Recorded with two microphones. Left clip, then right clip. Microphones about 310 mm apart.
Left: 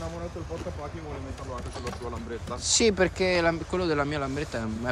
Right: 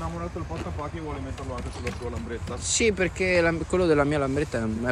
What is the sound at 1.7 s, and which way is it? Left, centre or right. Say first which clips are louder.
Speech: right 2 dB; centre.